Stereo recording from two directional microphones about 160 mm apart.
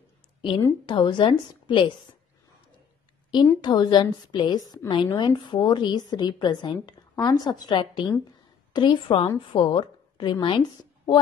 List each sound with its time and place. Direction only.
0.8 s a woman's voice: 30° left (ahead or behind)
3.6 s a woman's voice: 25° left (ahead or behind)